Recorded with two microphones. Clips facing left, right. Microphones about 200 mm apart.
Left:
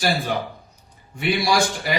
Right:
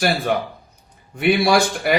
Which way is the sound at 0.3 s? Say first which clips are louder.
Right 4 dB; 55° right (ahead or behind).